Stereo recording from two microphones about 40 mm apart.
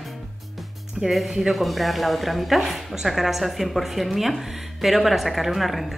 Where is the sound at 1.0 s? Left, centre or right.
Centre.